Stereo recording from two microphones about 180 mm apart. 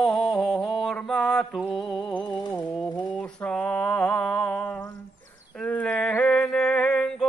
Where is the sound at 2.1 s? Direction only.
25° left (ahead or behind).